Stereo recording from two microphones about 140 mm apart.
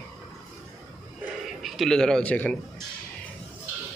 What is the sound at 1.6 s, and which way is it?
Speech, centre (ahead or behind).